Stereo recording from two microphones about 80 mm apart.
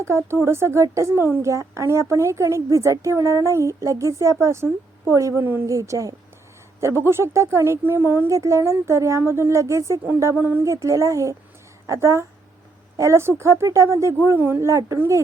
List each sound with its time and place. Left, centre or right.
0.0 s a woman's voice: right
5.6 s a woman's voice: right
8.3 s a woman's voice: right
10.3 s speech: right
10.6 s a woman's voice: right